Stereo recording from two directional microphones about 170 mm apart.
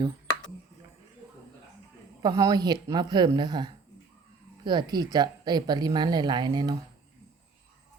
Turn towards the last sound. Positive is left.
turn(degrees=-25)  # may be behind; listen again after turning